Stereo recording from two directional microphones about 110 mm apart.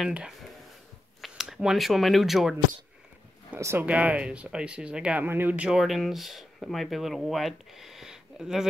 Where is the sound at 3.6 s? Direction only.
25° right (ahead or behind).